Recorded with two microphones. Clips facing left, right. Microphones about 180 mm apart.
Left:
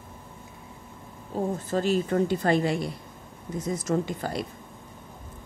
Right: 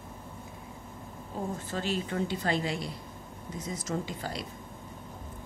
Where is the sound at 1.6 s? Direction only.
40° left (ahead or behind).